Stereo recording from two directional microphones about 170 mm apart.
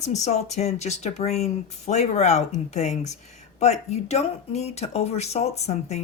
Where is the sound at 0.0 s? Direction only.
40° left (ahead or behind).